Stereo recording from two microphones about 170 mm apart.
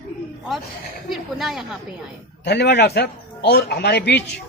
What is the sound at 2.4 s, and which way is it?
Speech, 75° left (ahead or behind).